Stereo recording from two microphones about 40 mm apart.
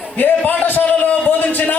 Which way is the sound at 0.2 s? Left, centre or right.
Left.